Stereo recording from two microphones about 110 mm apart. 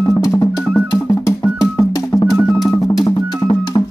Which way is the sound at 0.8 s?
25° left (ahead or behind).